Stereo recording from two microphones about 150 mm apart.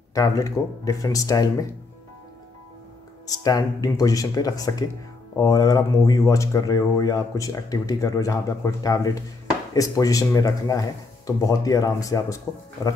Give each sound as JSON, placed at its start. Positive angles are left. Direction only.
{"t": 0.1, "sound": "speech", "side_deg": 25}
{"t": 3.3, "sound": "speech", "side_deg": 25}